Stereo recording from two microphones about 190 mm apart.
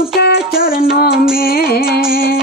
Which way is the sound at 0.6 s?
50° left (ahead or behind).